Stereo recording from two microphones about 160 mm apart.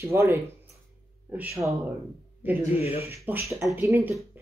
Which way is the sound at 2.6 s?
40° left (ahead or behind).